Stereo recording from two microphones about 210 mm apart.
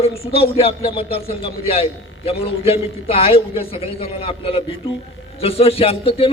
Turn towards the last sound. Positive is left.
turn(degrees=30)  # may be behind; listen again after turning